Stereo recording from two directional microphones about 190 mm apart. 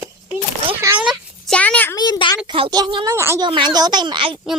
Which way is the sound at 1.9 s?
20° left (ahead or behind).